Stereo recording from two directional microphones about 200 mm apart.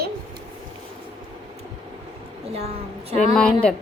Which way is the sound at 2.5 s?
30° right (ahead or behind).